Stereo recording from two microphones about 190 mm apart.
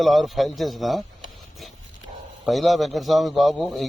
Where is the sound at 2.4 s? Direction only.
Centre (ahead or behind).